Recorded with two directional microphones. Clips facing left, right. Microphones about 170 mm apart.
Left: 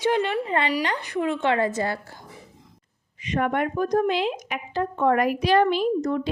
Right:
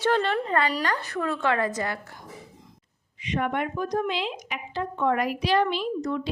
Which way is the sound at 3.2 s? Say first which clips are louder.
Left 3 dB; 45° left (ahead or behind).